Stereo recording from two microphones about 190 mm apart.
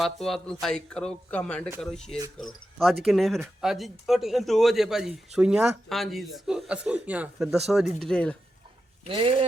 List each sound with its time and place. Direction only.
0.0 s speech: centre (ahead or behind)
9.0 s speech: 30° right (ahead or behind)